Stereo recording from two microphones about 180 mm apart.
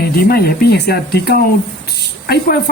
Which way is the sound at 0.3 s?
60° left (ahead or behind).